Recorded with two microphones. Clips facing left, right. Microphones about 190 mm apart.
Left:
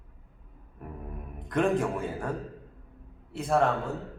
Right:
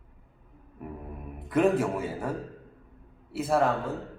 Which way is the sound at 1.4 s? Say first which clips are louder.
Right 2 dB; 5° right (ahead or behind).